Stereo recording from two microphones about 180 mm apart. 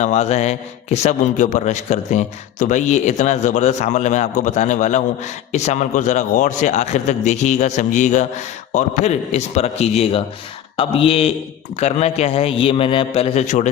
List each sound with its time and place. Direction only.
0.0 s a man's voice: 40° left (ahead or behind)